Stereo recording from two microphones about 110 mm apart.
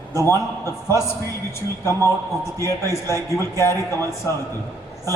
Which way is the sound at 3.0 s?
25° left (ahead or behind).